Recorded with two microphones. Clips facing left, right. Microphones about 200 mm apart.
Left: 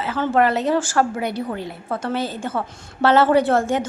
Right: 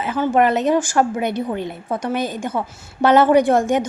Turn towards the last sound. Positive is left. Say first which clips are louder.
# right 3 dB
turn(degrees=-15)  # may be behind; listen again after turning